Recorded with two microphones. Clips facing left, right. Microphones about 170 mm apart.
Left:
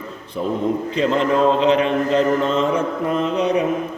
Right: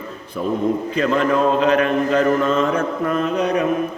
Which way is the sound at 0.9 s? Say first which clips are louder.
Left 1 dB; 25° left (ahead or behind).